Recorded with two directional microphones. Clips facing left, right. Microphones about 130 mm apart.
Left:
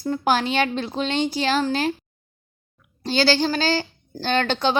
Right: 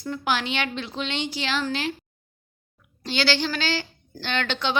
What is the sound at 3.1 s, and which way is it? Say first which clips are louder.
A woman's voice: left 5 dB; 40° left (ahead or behind).